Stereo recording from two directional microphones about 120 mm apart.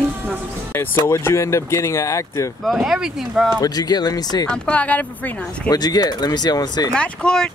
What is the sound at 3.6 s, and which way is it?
Speech, 35° left (ahead or behind).